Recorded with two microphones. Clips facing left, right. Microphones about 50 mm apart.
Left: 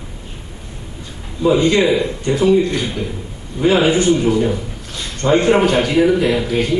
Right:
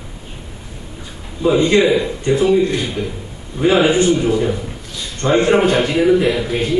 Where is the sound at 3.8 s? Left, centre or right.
Right.